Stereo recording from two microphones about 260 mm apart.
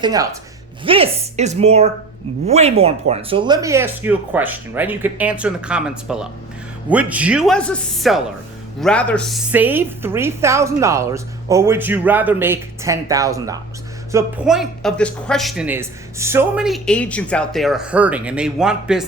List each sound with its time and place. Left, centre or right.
0.0 s a woman's voice: centre